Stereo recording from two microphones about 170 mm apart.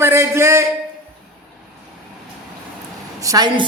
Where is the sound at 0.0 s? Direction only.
15° right (ahead or behind).